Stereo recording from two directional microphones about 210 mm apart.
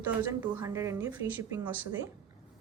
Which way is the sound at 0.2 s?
10° right (ahead or behind).